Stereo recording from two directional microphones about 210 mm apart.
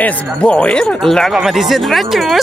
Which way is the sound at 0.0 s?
5° left (ahead or behind).